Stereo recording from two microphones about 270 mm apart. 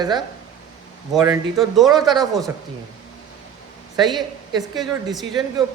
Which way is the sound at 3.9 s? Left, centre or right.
Centre.